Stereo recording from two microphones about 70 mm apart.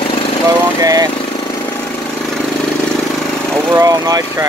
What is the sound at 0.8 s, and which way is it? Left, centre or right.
Vehicle, right.